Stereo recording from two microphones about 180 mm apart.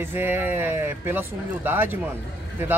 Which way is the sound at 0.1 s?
10° right (ahead or behind).